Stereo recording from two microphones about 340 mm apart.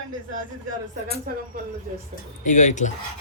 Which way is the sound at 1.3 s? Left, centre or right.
Right.